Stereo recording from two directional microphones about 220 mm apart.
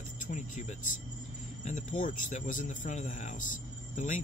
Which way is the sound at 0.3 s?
30° left (ahead or behind).